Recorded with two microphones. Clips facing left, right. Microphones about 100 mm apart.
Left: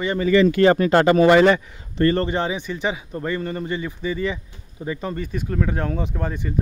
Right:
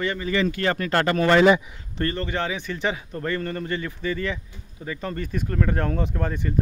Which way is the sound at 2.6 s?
10° left (ahead or behind).